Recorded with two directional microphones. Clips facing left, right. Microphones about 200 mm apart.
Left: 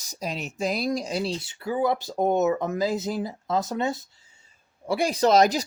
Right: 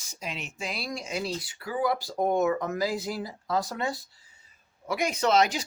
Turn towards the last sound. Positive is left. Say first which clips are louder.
# left 5 dB
turn(degrees=40)  # may be behind; listen again after turning